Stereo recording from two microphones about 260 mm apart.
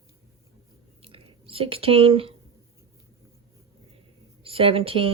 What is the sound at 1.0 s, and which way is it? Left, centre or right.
Chewing, right.